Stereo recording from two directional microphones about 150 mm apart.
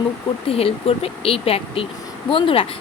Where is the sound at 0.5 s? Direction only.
40° left (ahead or behind).